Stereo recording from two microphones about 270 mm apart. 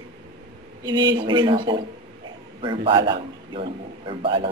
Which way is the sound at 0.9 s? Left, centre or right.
Centre.